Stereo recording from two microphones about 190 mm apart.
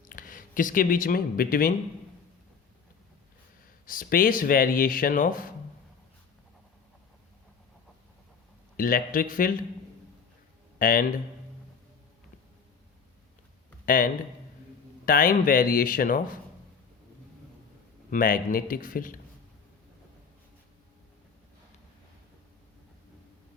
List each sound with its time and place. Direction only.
0.0 s speech: 45° left (ahead or behind)
3.8 s speech: 45° left (ahead or behind)
8.7 s speech: 50° left (ahead or behind)
10.8 s speech: 45° left (ahead or behind)
13.8 s speech: 50° left (ahead or behind)
18.1 s speech: 45° left (ahead or behind)